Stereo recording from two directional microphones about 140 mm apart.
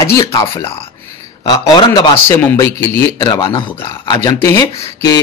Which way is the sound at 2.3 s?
15° left (ahead or behind).